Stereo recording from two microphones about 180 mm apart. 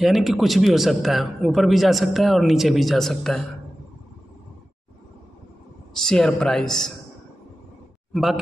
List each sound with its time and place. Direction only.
0.0 s a man's voice: centre (ahead or behind)
5.9 s a man's voice: 5° left (ahead or behind)
8.1 s a man's voice: centre (ahead or behind)